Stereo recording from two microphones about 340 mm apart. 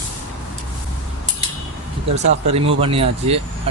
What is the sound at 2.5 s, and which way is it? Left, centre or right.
Speech, centre.